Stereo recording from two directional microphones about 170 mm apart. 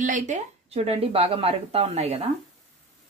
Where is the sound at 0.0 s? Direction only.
45° right (ahead or behind).